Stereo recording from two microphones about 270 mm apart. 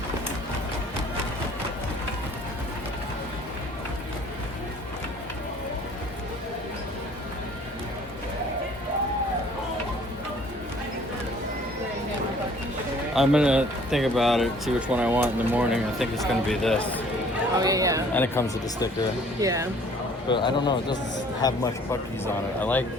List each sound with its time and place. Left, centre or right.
13.1 s speech: centre
17.6 s speech: centre
18.1 s speech: centre
19.4 s speech: centre
20.2 s speech: centre
22.6 s speech: centre